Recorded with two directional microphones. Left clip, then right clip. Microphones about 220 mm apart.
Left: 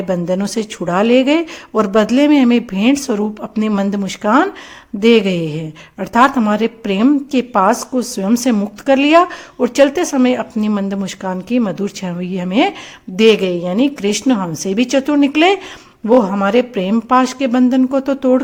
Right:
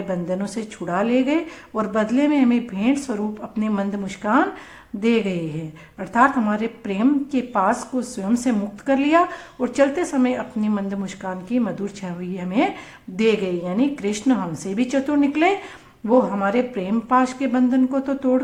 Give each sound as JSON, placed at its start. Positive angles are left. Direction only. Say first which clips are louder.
{"t": 0.1, "sound": "a woman's voice", "louder": "left 8 dB", "side_deg": 35}